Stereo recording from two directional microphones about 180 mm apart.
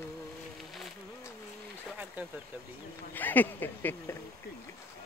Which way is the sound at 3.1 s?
10° left (ahead or behind).